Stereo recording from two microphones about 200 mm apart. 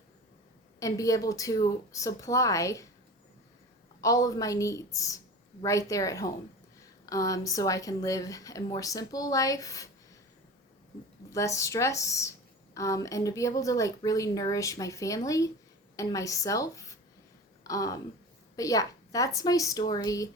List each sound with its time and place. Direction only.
0.8 s speech: 15° left (ahead or behind)
4.0 s speech: 15° left (ahead or behind)
11.3 s speech: 15° left (ahead or behind)
17.6 s a sound: 15° left (ahead or behind)
18.5 s a woman's voice: 15° left (ahead or behind)